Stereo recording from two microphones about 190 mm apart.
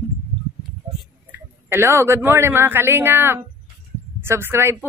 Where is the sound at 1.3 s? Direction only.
10° right (ahead or behind).